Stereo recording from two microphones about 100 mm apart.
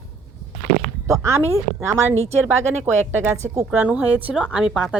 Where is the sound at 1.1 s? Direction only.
25° right (ahead or behind).